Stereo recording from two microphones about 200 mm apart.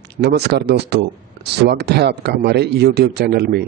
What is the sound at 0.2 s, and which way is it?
A man's voice, 55° right (ahead or behind).